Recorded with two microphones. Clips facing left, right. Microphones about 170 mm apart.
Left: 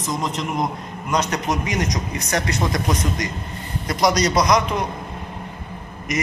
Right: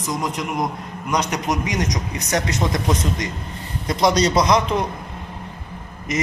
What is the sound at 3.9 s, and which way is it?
Speech, 25° right (ahead or behind).